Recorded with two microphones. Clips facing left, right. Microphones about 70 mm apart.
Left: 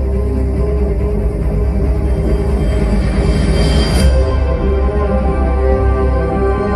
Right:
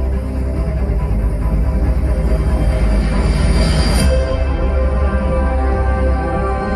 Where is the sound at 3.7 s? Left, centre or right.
Right.